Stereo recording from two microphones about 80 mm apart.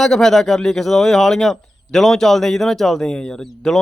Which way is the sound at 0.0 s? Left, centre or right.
Centre.